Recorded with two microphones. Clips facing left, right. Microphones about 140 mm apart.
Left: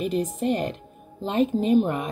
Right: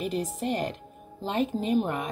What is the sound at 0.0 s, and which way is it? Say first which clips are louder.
Speech: left 5 dB; 30° left (ahead or behind).